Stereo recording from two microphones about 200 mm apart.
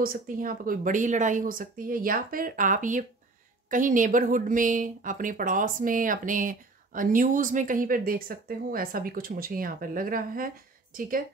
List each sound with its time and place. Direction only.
0.0 s speech: 45° right (ahead or behind)